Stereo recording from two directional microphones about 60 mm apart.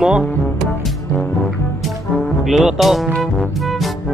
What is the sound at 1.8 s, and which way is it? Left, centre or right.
Music, centre.